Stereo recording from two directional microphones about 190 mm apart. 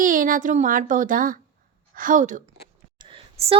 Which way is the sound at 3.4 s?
30° right (ahead or behind).